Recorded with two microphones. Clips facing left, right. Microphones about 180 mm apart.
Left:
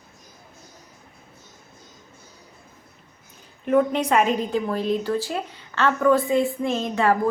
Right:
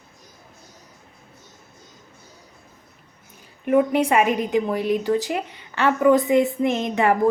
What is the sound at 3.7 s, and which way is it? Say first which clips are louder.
Speech: right 2 dB; 10° right (ahead or behind).